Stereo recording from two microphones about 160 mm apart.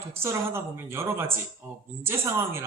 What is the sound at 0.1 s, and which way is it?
A man's voice, 15° right (ahead or behind).